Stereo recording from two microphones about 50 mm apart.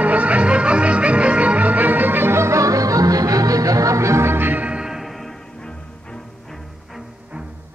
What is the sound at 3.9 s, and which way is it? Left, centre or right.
Music, right.